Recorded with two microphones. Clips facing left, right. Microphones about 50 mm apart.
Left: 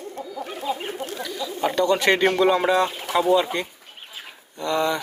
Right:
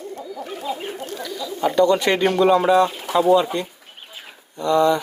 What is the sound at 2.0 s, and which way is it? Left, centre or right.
Speech, left.